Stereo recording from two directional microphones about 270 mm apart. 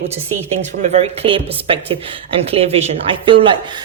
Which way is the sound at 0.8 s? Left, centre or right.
Right.